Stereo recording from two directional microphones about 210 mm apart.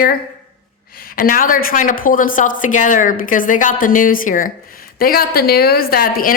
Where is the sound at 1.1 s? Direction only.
40° left (ahead or behind).